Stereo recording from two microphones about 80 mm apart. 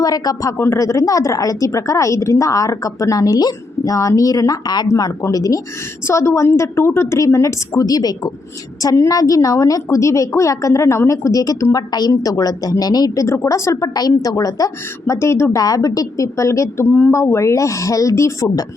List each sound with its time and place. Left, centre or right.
0.0 s speech: left
0.5 s speech: left
4.9 s a woman's voice: left
13.2 s a woman's voice: left
15.5 s a woman's voice: left